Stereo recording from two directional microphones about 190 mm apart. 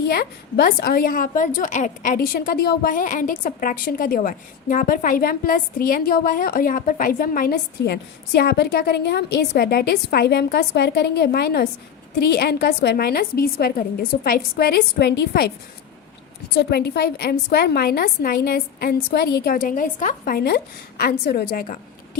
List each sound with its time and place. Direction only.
0.1 s a woman's voice: 55° left (ahead or behind)
16.6 s a woman's voice: 55° left (ahead or behind)